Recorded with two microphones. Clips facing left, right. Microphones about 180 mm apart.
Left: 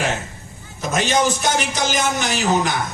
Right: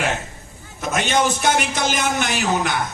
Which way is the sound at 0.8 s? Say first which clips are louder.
Left 1 dB; 55° right (ahead or behind).